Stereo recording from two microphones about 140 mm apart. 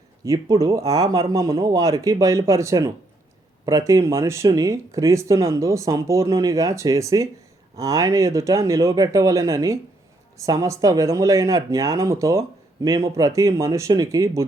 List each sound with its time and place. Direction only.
0.3 s speech: 25° right (ahead or behind)